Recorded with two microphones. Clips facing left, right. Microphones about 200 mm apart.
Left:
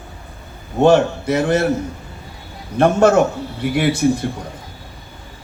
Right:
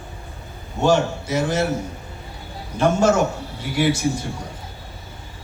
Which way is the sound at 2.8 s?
60° left (ahead or behind).